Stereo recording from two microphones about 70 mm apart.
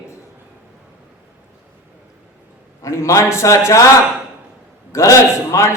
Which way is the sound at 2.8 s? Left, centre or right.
Left.